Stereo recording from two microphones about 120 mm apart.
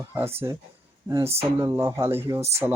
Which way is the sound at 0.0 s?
20° right (ahead or behind).